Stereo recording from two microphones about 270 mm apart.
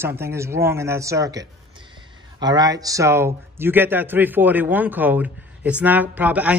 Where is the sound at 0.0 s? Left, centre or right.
Centre.